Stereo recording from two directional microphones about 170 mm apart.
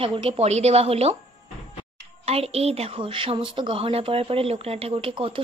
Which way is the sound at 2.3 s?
35° right (ahead or behind).